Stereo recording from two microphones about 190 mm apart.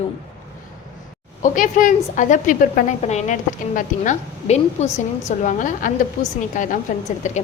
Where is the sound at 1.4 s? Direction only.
45° left (ahead or behind).